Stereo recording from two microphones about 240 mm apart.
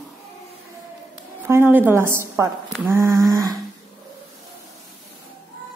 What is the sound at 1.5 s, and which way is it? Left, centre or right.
A woman's voice, centre.